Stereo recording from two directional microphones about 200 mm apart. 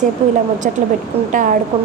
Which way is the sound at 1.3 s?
40° right (ahead or behind).